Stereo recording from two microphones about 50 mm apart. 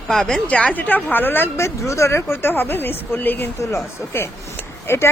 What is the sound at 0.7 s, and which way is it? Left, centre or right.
Speech, left.